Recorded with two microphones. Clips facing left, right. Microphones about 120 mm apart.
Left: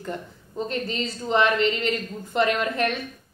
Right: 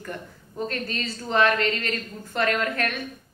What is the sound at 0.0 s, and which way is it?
Speech, 20° left (ahead or behind).